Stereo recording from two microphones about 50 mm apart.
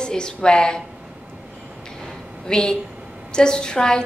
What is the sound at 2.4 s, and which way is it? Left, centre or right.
A woman's voice, centre.